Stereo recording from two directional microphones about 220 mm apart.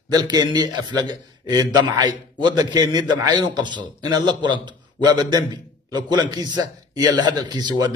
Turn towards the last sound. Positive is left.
turn(degrees=-20)  # may be behind; listen again after turning